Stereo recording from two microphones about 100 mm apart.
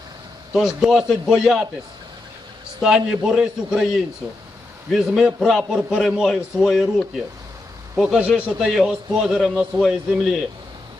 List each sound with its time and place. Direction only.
0.5 s a man's voice: 5° right (ahead or behind)
2.8 s a man's voice: 5° right (ahead or behind)
4.9 s a man's voice: 5° right (ahead or behind)